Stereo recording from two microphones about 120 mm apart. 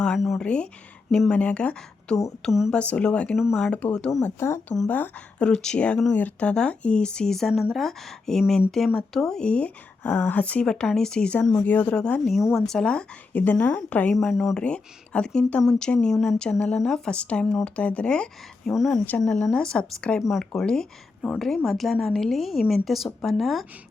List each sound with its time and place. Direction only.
0.0 s speech: centre (ahead or behind)
2.4 s speech: centre (ahead or behind)
2.7 s speech: 10° left (ahead or behind)
4.2 s speech: 20° left (ahead or behind)
14.2 s speech: centre (ahead or behind)
18.7 s speech: centre (ahead or behind)